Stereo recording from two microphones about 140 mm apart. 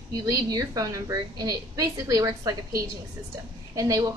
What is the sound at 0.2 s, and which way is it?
A woman's voice, 25° right (ahead or behind).